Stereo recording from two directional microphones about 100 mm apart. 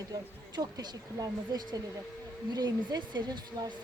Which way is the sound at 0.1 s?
45° right (ahead or behind).